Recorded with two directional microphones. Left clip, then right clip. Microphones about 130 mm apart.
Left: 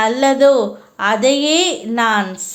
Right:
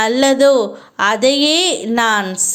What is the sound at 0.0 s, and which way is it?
A woman's voice, 35° right (ahead or behind).